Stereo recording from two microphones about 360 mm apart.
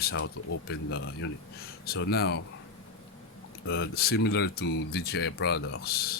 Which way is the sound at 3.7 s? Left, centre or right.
Left.